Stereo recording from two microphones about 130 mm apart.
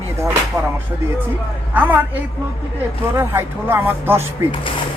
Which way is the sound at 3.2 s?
15° right (ahead or behind).